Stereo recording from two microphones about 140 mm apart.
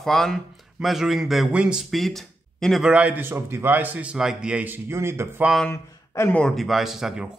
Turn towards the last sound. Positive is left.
turn(degrees=-5)  # may be behind; listen again after turning